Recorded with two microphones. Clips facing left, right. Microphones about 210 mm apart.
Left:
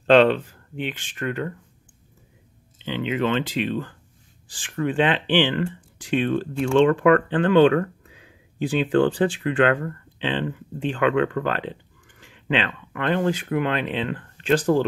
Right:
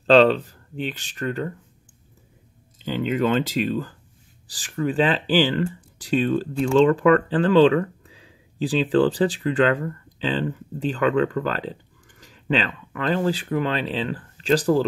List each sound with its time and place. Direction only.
0.0 s speech: 35° right (ahead or behind)
2.8 s speech: 45° right (ahead or behind)